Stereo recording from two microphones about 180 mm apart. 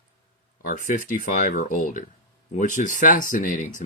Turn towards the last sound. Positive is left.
turn(degrees=45)  # may be behind; listen again after turning